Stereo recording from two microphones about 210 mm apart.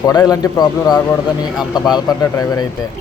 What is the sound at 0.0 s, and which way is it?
Speech, 20° left (ahead or behind).